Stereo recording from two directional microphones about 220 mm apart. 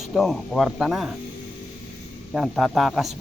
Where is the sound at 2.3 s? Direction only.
Centre (ahead or behind).